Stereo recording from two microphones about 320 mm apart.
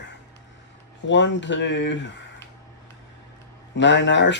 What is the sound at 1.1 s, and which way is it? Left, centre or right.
Speech, left.